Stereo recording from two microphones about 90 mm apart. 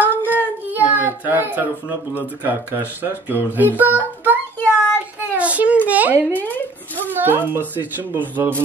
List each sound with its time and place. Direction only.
0.0 s child singing: 20° left (ahead or behind)
0.8 s child singing: 20° right (ahead or behind)
2.4 s speech: 20° right (ahead or behind)
5.3 s a sound: 15° right (ahead or behind)
6.3 s a sound: 20° left (ahead or behind)
7.1 s speech: 20° right (ahead or behind)